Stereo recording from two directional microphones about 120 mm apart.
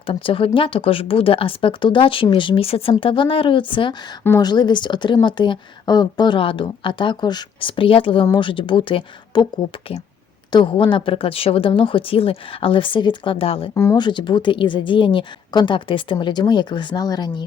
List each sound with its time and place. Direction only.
0.0 s a woman's voice: 50° left (ahead or behind)
10.5 s a woman's voice: 45° left (ahead or behind)
13.9 s speech: 40° left (ahead or behind)